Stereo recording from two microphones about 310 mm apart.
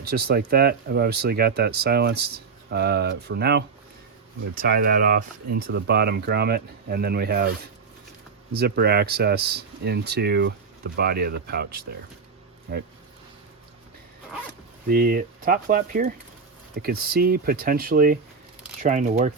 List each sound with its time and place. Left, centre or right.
0.0 s speech: right
4.6 s speech: right
14.8 s speech: right